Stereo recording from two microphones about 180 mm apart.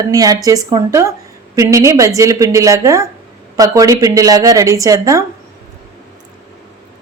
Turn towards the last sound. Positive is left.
turn(degrees=-20)  # may be behind; listen again after turning